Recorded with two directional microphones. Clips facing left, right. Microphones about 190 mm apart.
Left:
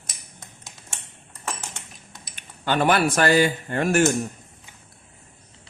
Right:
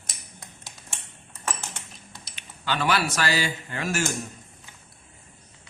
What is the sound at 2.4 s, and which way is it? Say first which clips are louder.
Speech: left 6 dB; 50° left (ahead or behind).